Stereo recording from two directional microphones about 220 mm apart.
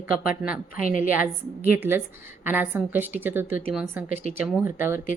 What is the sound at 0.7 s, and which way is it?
Speech, 40° left (ahead or behind).